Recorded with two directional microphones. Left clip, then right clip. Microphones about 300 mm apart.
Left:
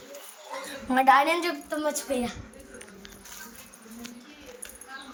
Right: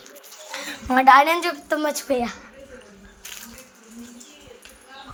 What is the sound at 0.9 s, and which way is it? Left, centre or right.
A woman's voice, centre.